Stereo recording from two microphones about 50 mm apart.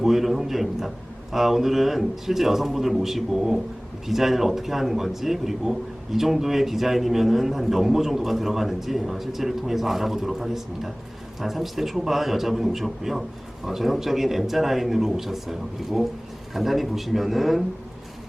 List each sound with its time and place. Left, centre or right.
0.0 s a man's voice: centre